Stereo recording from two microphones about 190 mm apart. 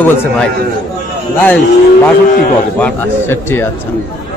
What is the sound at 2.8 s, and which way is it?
Speech, 10° left (ahead or behind).